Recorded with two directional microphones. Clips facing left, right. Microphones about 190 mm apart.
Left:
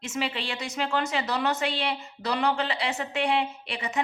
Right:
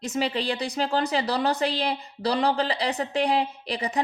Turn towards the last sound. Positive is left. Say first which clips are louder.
# right 5 dB
turn(degrees=-35)  # may be behind; listen again after turning